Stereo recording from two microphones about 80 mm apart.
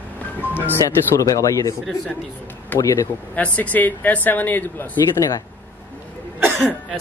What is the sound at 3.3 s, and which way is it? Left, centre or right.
Speech, centre.